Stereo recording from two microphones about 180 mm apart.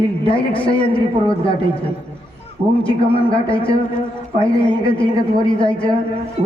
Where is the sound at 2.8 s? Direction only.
30° left (ahead or behind).